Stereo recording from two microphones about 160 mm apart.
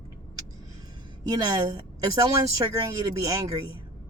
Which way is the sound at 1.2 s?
25° right (ahead or behind).